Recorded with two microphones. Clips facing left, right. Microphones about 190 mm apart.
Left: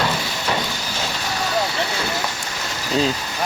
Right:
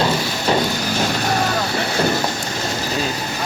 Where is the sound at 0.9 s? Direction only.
55° right (ahead or behind).